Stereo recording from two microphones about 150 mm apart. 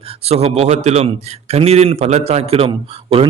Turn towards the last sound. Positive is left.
turn(degrees=-40)  # may be behind; listen again after turning